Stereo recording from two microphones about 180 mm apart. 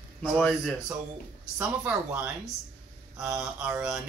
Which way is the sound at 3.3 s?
5° right (ahead or behind).